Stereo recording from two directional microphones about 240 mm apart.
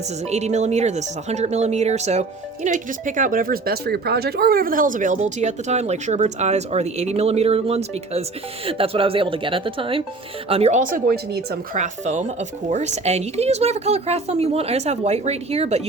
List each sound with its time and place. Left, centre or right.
0.3 s speech: right